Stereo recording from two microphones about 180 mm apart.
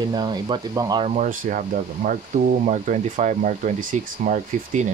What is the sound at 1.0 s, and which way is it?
Speech, 40° right (ahead or behind).